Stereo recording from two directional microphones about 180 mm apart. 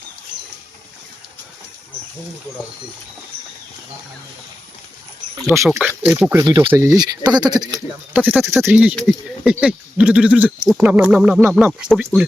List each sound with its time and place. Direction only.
5.5 s speech: 15° right (ahead or behind)
6.4 s speech: 25° right (ahead or behind)
8.1 s speech: 10° right (ahead or behind)